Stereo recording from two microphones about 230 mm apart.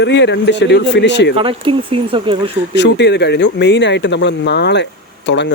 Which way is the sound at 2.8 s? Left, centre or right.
Left.